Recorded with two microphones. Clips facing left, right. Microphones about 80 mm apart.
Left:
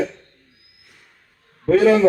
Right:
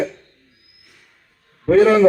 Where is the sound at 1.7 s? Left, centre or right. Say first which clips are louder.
Right 2 dB; right.